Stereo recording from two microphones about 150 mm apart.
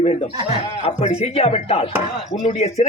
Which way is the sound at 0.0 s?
45° left (ahead or behind).